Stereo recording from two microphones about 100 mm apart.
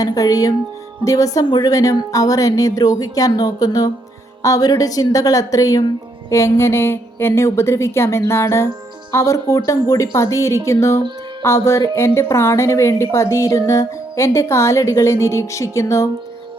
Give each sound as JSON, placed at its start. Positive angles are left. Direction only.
{"t": 0.0, "sound": "a woman's voice", "side_deg": 35}